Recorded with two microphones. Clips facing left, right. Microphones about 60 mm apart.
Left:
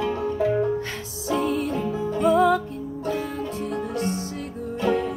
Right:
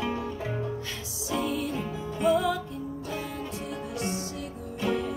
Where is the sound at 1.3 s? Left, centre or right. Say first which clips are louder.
Left 6 dB; left.